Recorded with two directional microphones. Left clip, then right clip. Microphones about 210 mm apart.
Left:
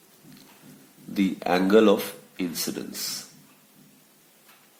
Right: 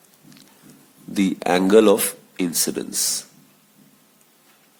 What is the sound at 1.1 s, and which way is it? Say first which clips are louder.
Speech: right 4 dB; 45° right (ahead or behind).